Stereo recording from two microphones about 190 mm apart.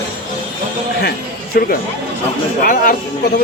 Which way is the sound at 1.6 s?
50° left (ahead or behind).